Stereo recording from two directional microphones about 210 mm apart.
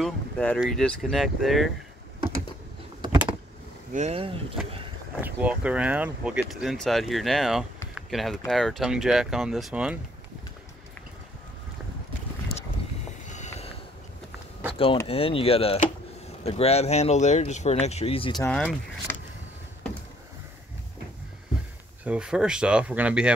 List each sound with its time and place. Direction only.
0.0 s speech: 5° left (ahead or behind)
3.0 s vehicle: 20° right (ahead or behind)
3.9 s speech: 30° right (ahead or behind)
5.2 s speech: 5° right (ahead or behind)
7.9 s a sound: centre (ahead or behind)
8.5 s speech: centre (ahead or behind)
13.3 s vehicle: 35° left (ahead or behind)
15.0 s speech: 25° left (ahead or behind)
18.4 s speech: 5° left (ahead or behind)
22.0 s speech: 5° right (ahead or behind)